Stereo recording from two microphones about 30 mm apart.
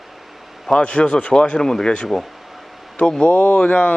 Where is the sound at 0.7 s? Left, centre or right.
Left.